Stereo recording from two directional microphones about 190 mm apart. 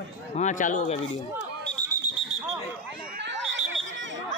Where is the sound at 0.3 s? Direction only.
40° left (ahead or behind).